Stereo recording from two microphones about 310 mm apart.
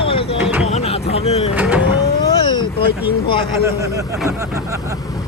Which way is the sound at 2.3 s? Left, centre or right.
Centre.